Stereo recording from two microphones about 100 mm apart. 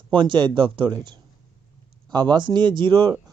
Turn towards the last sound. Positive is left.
turn(degrees=-55)  # may be behind; listen again after turning